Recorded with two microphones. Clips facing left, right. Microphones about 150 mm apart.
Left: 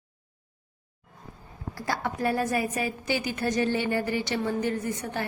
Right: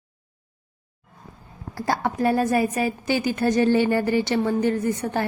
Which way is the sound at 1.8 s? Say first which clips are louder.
Right 6 dB; 35° right (ahead or behind).